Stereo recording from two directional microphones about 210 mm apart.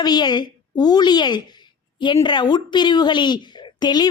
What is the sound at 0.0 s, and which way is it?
A woman's voice, 20° left (ahead or behind).